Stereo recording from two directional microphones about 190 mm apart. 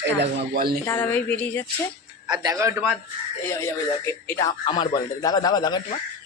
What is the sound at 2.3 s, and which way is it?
Speech, 20° right (ahead or behind).